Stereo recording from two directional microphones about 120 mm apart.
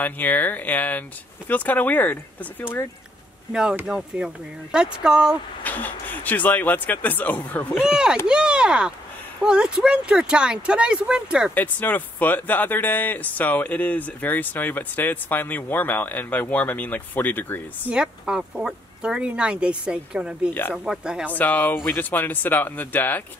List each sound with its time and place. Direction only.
0.0 s speech: 15° left (ahead or behind)
3.8 s speech: 5° right (ahead or behind)
5.6 s speech: 15° left (ahead or behind)
7.7 s speech: 5° right (ahead or behind)
11.5 s speech: 15° left (ahead or behind)
17.8 s speech: 5° right (ahead or behind)
21.3 s speech: 15° left (ahead or behind)